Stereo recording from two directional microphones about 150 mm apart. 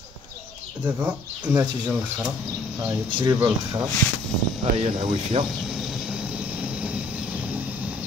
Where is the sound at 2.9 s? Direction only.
30° right (ahead or behind).